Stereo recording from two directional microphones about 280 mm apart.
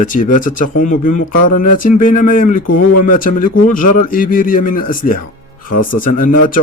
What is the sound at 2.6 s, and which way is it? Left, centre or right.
Speech, left.